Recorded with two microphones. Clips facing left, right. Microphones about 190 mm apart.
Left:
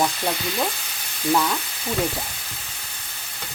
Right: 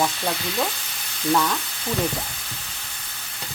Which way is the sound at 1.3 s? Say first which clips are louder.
Even; 5° left (ahead or behind).